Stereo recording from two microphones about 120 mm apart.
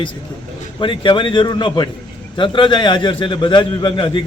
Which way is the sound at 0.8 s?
45° left (ahead or behind).